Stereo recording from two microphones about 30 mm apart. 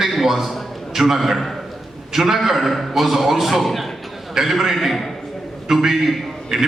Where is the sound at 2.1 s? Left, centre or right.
Centre.